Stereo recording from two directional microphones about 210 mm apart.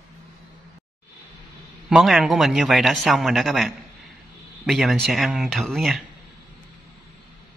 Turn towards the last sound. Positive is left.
turn(degrees=0)  # may be behind; listen again after turning